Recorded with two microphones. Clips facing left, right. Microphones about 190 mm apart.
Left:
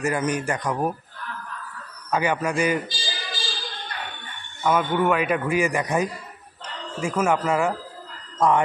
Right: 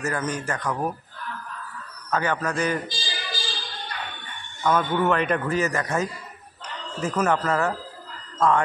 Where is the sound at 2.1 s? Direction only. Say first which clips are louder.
Left 2 dB; 10° left (ahead or behind).